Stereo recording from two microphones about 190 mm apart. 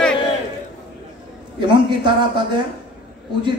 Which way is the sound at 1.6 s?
25° right (ahead or behind).